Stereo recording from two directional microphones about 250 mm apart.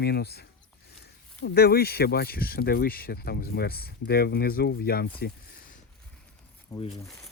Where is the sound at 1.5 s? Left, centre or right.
Left.